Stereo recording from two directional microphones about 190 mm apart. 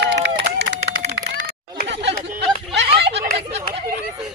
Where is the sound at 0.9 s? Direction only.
65° right (ahead or behind).